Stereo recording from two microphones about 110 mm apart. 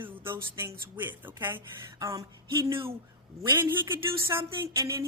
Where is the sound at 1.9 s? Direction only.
30° right (ahead or behind).